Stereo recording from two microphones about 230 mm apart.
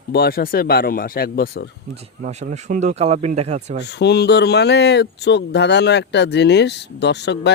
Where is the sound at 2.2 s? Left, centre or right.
Right.